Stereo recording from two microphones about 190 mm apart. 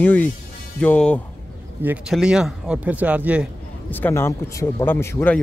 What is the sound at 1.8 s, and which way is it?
Speech, 5° right (ahead or behind).